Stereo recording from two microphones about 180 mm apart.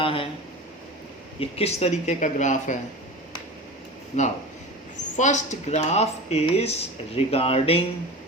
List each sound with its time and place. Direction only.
0.0 s speech: 30° left (ahead or behind)
1.4 s speech: 35° left (ahead or behind)
4.1 s speech: 40° left (ahead or behind)